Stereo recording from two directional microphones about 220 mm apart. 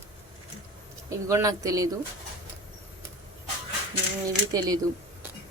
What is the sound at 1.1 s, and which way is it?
Speech, 15° right (ahead or behind).